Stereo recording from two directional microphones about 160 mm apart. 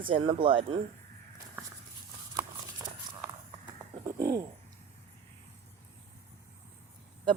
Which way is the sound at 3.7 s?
20° right (ahead or behind).